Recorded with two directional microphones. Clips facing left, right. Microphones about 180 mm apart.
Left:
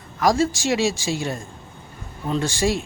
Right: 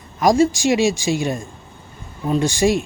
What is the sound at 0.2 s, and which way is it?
Speech, 15° right (ahead or behind).